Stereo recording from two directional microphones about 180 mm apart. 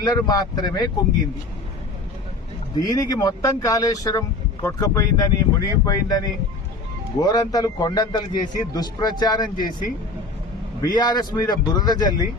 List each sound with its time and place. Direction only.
0.0 s a man's voice: 20° left (ahead or behind)
2.8 s a man's voice: 20° left (ahead or behind)
10.8 s a man's voice: 20° left (ahead or behind)